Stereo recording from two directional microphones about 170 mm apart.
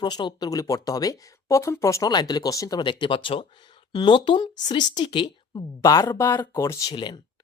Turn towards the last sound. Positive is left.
turn(degrees=25)  # may be behind; listen again after turning